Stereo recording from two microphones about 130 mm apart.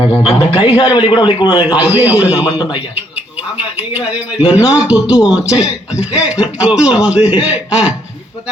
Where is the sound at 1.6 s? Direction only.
10° right (ahead or behind).